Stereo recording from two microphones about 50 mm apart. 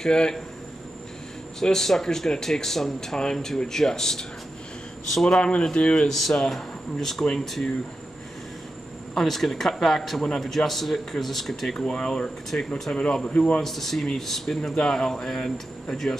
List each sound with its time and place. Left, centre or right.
0.0 s speech: centre
1.6 s speech: centre
6.0 s speech: centre
9.1 s speech: centre; by 13.6 s left
13.6 s speech: centre